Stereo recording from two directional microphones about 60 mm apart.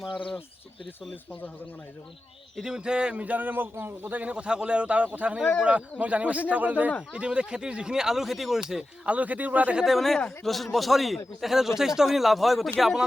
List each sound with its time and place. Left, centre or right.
2.6 s speech: centre
9.0 s speech: right
9.8 s speech: centre